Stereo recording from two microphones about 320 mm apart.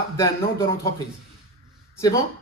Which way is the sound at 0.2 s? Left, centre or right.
Centre.